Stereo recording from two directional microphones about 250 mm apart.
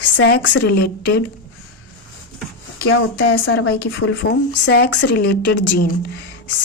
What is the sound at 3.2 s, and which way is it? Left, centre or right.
A woman's voice, left.